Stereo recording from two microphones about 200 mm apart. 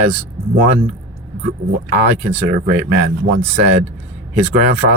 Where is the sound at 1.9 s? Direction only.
40° right (ahead or behind).